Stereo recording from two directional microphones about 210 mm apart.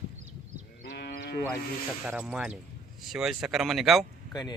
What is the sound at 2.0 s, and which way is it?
Speech, 5° right (ahead or behind).